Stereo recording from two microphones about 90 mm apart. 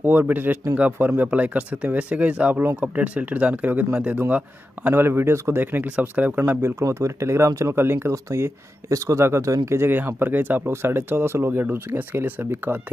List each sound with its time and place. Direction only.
0.0 s speech: 20° right (ahead or behind)
4.8 s speech: 25° right (ahead or behind)